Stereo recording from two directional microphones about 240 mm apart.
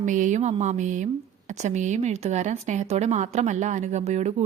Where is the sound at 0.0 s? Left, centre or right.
Right.